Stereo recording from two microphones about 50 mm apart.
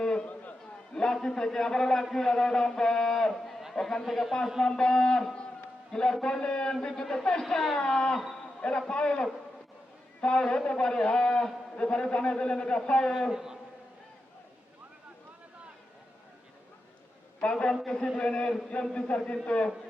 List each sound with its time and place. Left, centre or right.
0.0 s a sound: centre
0.9 s a man's voice: centre
4.6 s a man's voice: centre
7.4 s speech: centre
7.8 s a man's voice: centre
13.3 s a man's voice: centre
17.4 s a man's voice: centre